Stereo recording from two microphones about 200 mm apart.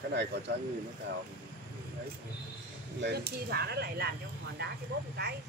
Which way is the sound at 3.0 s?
55° right (ahead or behind).